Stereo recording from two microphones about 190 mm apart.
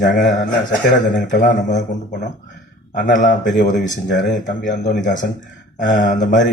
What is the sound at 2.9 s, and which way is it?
Speech, 45° left (ahead or behind).